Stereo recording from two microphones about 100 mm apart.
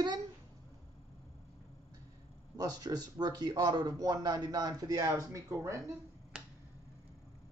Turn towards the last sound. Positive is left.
turn(degrees=-5)  # may be behind; listen again after turning